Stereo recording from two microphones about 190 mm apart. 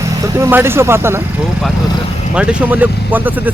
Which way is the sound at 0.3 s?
15° right (ahead or behind).